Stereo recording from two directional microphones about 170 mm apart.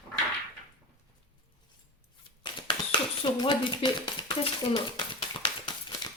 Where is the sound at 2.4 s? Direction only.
25° left (ahead or behind).